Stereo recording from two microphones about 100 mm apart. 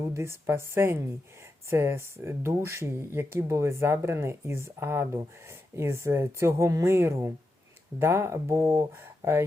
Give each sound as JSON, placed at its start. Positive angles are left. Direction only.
{"t": 0.1, "sound": "speech", "side_deg": -30}